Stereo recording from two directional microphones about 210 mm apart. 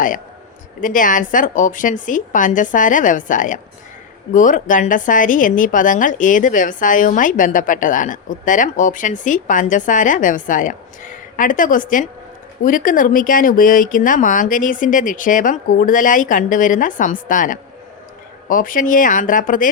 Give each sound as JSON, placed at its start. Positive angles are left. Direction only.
{"t": 0.8, "sound": "a woman's voice", "side_deg": 40}